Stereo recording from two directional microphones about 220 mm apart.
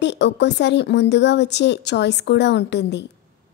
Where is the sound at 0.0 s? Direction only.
50° left (ahead or behind).